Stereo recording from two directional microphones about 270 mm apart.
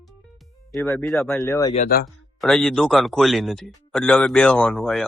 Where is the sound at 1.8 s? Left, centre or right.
Left.